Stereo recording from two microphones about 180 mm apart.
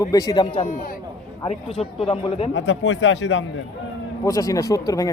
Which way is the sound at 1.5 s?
30° left (ahead or behind).